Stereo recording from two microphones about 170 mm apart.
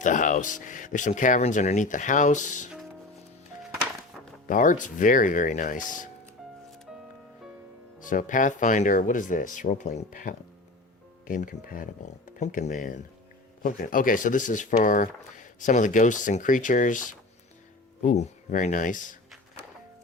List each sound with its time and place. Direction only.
0.0 s speech: 50° left (ahead or behind)
4.4 s speech: 50° left (ahead or behind)
8.0 s speech: 50° left (ahead or behind)